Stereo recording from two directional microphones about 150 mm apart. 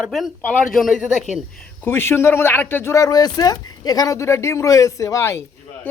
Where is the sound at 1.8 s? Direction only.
15° left (ahead or behind).